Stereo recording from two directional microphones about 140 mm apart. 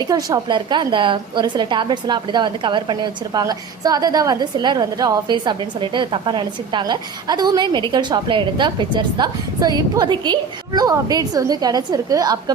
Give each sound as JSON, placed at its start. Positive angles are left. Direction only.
{"t": 0.0, "sound": "a woman's voice", "side_deg": -25}